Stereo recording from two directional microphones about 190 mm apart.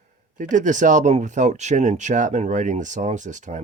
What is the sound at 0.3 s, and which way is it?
Speech, 40° right (ahead or behind).